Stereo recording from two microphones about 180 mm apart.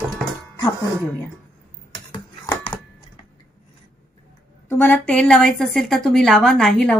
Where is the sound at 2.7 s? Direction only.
25° left (ahead or behind).